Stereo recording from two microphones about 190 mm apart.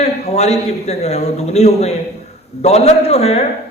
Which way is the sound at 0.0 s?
35° left (ahead or behind).